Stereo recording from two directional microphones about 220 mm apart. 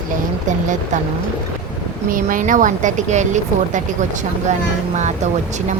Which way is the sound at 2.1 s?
40° right (ahead or behind).